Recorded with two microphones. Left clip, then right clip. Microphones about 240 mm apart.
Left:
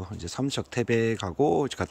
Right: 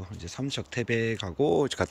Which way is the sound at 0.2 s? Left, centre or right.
Left.